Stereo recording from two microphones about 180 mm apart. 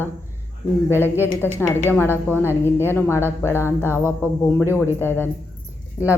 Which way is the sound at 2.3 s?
10° left (ahead or behind).